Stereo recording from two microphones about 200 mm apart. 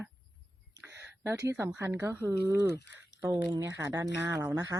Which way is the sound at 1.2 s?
15° right (ahead or behind).